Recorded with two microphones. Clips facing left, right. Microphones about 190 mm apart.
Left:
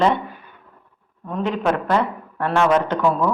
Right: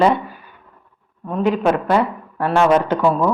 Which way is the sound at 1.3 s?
10° right (ahead or behind).